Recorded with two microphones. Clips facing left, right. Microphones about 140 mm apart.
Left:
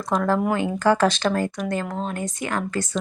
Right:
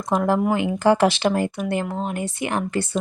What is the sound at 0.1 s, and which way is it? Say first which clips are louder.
Speech: right 2 dB; 15° right (ahead or behind).